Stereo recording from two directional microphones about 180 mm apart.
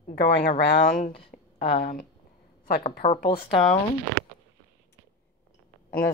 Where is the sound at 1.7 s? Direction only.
55° left (ahead or behind).